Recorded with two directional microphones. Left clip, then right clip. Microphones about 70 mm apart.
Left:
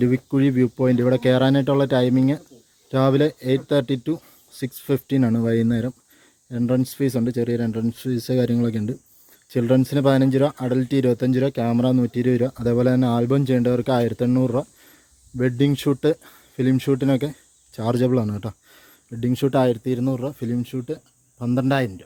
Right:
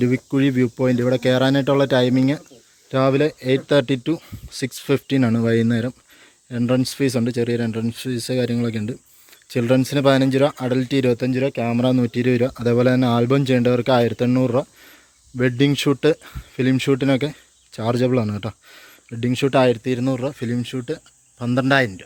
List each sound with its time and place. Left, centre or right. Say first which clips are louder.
0.0 s speech: right 1 dB; centre
3.1 s speech: even; left
3.7 s speech: right 3 dB; centre; by 9.0 s left
9.5 s speech: right 1 dB; left
11.9 s speech: right 2 dB; centre
17.7 s speech: right 1 dB; left
18.1 s speech: right 2 dB; left
19.3 s speech: right 3 dB; left
20.1 s speech: right 2 dB; centre